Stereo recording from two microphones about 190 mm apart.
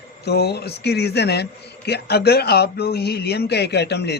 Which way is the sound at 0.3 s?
60° left (ahead or behind).